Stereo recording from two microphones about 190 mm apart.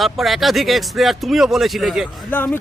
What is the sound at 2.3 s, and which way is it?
Speech, 10° left (ahead or behind).